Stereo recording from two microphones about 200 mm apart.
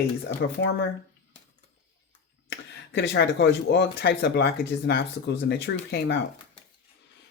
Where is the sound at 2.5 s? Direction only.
60° left (ahead or behind).